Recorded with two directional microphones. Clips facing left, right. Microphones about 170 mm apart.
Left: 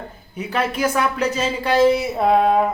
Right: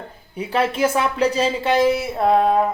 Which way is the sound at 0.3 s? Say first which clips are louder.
Right 2 dB; 30° right (ahead or behind).